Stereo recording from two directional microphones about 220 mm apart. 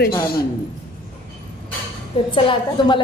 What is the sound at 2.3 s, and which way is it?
Speech, 20° left (ahead or behind).